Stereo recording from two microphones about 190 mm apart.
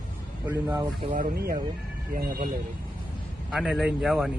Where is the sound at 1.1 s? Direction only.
50° right (ahead or behind).